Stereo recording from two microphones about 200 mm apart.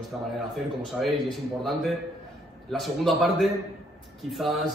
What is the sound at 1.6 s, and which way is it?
A man's voice, centre (ahead or behind).